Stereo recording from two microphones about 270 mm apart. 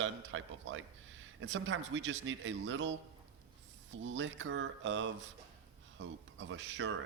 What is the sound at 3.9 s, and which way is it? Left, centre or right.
Speech, right.